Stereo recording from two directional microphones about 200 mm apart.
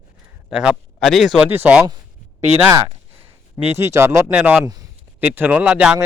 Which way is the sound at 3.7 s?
15° right (ahead or behind).